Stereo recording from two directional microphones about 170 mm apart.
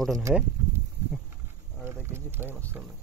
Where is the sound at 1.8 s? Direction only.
15° right (ahead or behind).